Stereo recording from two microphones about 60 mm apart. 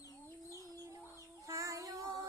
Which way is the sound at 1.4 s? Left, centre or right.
Right.